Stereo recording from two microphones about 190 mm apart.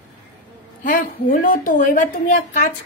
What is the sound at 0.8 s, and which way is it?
A woman's voice, 45° left (ahead or behind).